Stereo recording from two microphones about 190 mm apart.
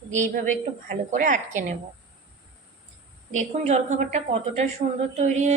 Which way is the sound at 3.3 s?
35° right (ahead or behind).